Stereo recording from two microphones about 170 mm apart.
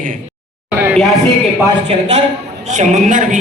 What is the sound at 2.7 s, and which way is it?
Speech, 45° right (ahead or behind).